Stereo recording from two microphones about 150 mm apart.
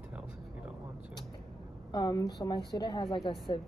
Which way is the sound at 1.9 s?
25° left (ahead or behind).